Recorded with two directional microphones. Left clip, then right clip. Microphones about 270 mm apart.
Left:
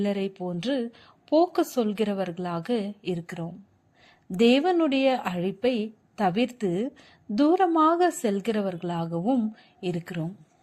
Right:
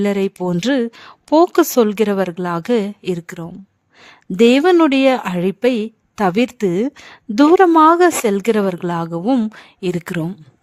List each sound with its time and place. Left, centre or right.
0.0 s speech: right